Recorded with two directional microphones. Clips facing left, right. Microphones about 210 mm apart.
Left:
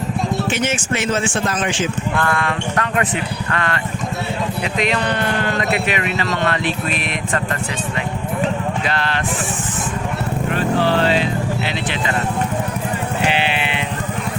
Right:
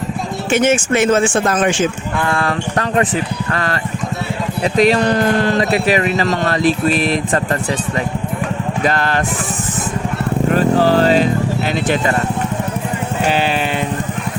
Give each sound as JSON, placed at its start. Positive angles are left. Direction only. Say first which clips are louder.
{"t": 0.5, "sound": "speech", "louder": "right 7 dB", "side_deg": -50}
{"t": 2.3, "sound": "speech", "louder": "right 2 dB", "side_deg": -35}
{"t": 4.8, "sound": "speech", "louder": "right 8 dB", "side_deg": -40}
{"t": 8.9, "sound": "speech", "louder": "right 5 dB", "side_deg": -45}
{"t": 10.5, "sound": "speech", "louder": "right 5 dB", "side_deg": -40}
{"t": 13.2, "sound": "sheep", "louder": "right 4 dB", "side_deg": -40}